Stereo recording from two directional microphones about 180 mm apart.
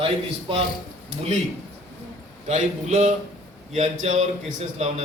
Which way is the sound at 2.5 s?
40° right (ahead or behind).